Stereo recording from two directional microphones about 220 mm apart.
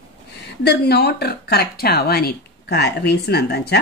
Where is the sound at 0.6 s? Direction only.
50° left (ahead or behind).